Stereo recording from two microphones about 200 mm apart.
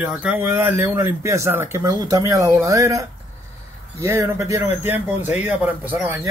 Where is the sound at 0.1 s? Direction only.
5° right (ahead or behind).